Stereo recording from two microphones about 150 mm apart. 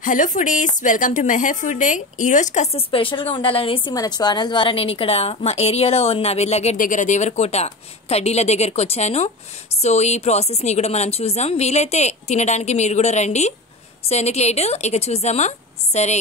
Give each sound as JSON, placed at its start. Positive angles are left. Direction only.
{"t": 0.0, "sound": "speech", "side_deg": 60}
{"t": 3.9, "sound": "a woman's voice", "side_deg": 25}
{"t": 6.8, "sound": "a woman's voice", "side_deg": 55}